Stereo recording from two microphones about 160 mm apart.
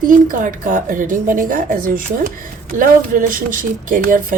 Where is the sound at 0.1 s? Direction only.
55° right (ahead or behind).